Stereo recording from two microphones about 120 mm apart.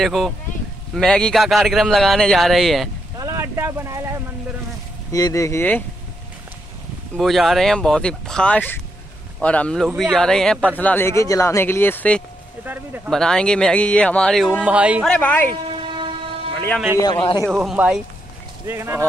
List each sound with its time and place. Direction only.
0.0 s speech: centre (ahead or behind)
3.2 s boat: 25° right (ahead or behind)
5.1 s speech: 30° left (ahead or behind)
7.2 s speech: centre (ahead or behind)
10.8 s speech: 15° left (ahead or behind)
12.6 s speech: 15° right (ahead or behind)
13.1 s speech: 5° left (ahead or behind); by 15.0 s 10° right (ahead or behind)
15.0 s speech: 15° left (ahead or behind)
16.5 s speech: 15° left (ahead or behind)
17.0 s a man's voice: 35° left (ahead or behind)
17.5 s speech: 5° right (ahead or behind); by 19.0 s 20° right (ahead or behind)